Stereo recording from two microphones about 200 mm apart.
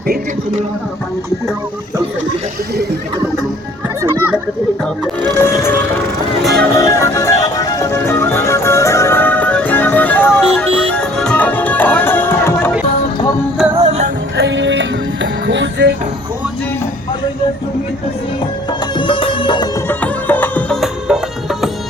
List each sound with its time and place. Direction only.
4.0 s children playing: 10° right (ahead or behind)
5.4 s music: 10° left (ahead or behind)
6.4 s speech: centre (ahead or behind)
6.7 s music: 15° left (ahead or behind)
13.8 s music: 35° right (ahead or behind)
14.3 s music: 65° right (ahead or behind)
18.9 s music: 25° left (ahead or behind)
19.9 s music: 10° left (ahead or behind)